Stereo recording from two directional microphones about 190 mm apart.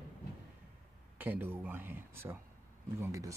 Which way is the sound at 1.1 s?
10° right (ahead or behind).